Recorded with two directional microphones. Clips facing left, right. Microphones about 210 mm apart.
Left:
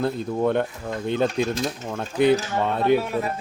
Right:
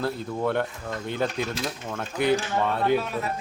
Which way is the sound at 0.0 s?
20° left (ahead or behind).